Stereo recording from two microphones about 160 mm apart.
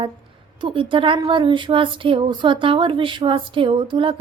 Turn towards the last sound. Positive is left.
turn(degrees=-30)  # may be behind; listen again after turning